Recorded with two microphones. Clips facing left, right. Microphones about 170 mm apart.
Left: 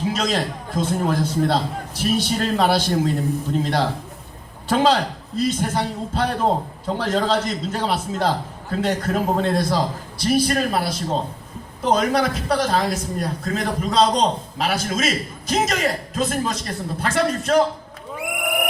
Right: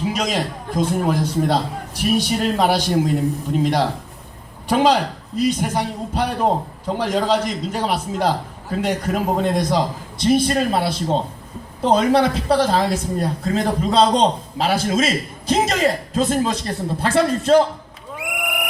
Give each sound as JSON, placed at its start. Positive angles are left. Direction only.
{"t": 0.1, "sound": "a man's voice", "side_deg": -15}